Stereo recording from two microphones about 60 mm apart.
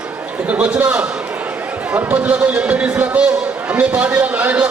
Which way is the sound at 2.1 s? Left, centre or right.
Right.